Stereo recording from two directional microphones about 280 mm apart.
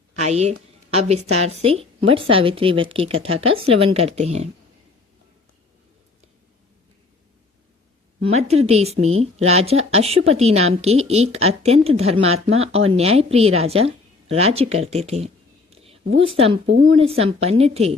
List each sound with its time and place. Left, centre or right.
0.2 s speech: right
8.2 s speech: right
12.2 s speech: right
12.5 s speech: right
15.7 s a sound: right
16.2 s speech: centre
16.6 s a woman's voice: right
16.9 s speech: right